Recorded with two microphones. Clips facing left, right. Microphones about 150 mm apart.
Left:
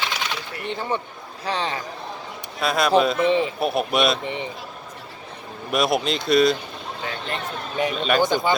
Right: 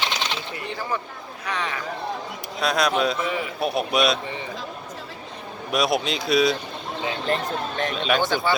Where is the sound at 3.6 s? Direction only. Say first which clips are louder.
Left 1 dB; centre (ahead or behind).